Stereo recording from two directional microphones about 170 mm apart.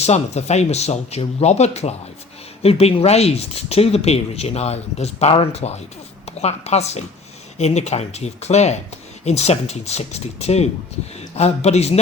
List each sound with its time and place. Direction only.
0.0 s speech: 40° left (ahead or behind)